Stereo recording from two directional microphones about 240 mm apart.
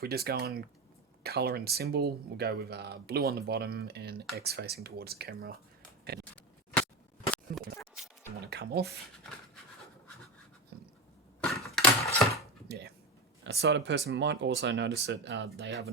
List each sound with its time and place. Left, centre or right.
0.0 s speech: right
8.4 s speech: right
11.5 s a sound: centre
12.6 s speech: right